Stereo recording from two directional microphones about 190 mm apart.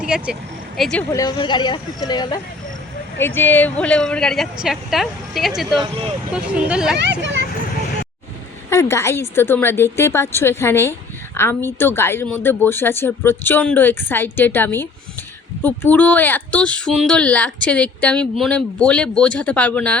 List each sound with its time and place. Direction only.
0.0 s a woman's voice: 5° right (ahead or behind)
1.1 s speech: 20° left (ahead or behind)
3.2 s a woman's voice: 10° left (ahead or behind); by 6.9 s 5° right (ahead or behind)
6.9 s a child's voice: 65° right (ahead or behind)
8.7 s speech: 15° left (ahead or behind)